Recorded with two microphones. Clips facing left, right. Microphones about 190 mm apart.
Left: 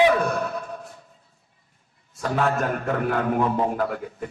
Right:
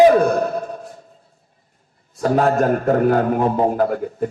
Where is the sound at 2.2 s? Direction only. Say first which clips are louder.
Right 7 dB; 40° right (ahead or behind).